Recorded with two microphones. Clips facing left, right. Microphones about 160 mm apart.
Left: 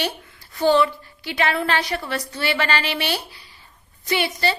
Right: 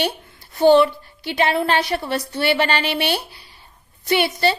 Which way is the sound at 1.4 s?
25° right (ahead or behind).